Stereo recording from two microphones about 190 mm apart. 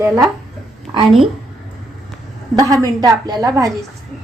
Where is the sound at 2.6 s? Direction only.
20° right (ahead or behind).